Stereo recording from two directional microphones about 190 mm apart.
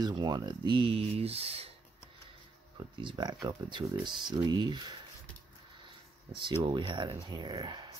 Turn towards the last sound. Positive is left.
turn(degrees=-25)  # may be behind; listen again after turning